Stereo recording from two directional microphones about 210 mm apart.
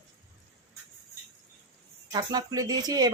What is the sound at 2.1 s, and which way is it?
Speech, 20° right (ahead or behind).